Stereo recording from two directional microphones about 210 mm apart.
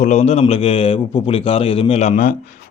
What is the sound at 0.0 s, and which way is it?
A man's voice, 35° left (ahead or behind).